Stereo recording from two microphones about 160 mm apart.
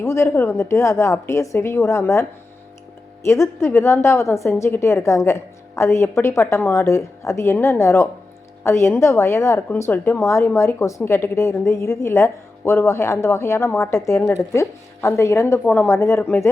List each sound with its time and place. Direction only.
0.0 s a woman's voice: 15° left (ahead or behind)
3.2 s a woman's voice: 15° left (ahead or behind)